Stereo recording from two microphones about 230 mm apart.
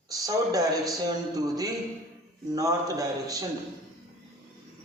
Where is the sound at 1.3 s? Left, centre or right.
Centre.